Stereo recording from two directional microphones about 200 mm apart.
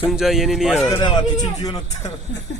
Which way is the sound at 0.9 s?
20° left (ahead or behind).